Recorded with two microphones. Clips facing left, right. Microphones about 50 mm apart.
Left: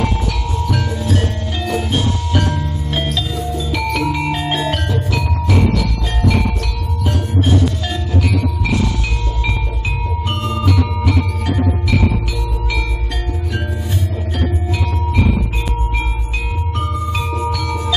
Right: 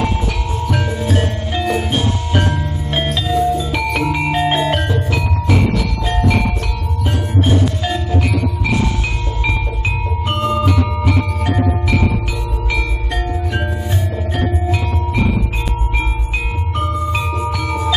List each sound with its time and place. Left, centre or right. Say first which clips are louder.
0.7 s music: right 1 dB; centre
10.4 s music: right 6 dB; centre
16.8 s glockenspiel: right 4 dB; centre